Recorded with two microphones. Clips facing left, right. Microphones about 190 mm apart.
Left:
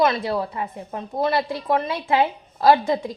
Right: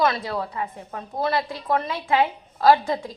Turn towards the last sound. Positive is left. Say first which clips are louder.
# left 1 dB
turn(degrees=20)  # may be behind; listen again after turning